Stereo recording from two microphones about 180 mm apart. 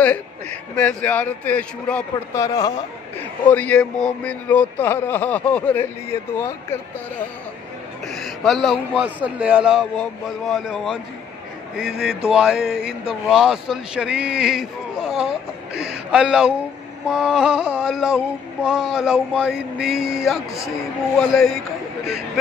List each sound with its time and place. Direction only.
0.0 s speech: 5° left (ahead or behind)
2.4 s speech: 20° left (ahead or behind)
3.4 s speech: 10° left (ahead or behind)
8.1 s speech: centre (ahead or behind)
12.3 s speech: 5° right (ahead or behind)